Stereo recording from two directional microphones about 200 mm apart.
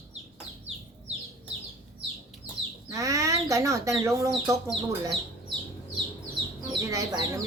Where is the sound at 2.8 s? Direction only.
15° right (ahead or behind).